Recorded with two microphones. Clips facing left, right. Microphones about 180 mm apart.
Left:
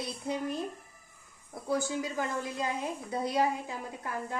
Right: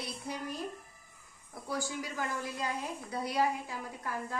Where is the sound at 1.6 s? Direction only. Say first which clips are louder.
Left 6 dB; 20° left (ahead or behind).